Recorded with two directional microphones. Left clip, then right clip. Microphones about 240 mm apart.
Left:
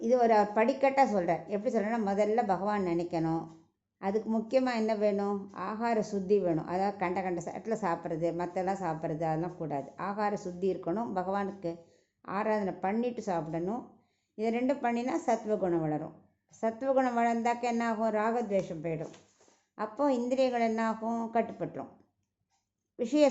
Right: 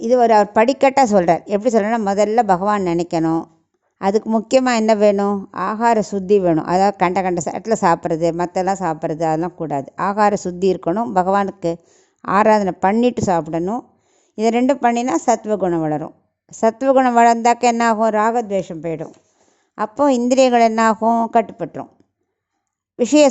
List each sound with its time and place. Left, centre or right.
0.0 s a woman's voice: right
23.0 s a woman's voice: right